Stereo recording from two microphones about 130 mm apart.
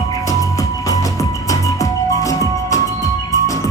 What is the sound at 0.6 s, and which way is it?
Music, 25° left (ahead or behind).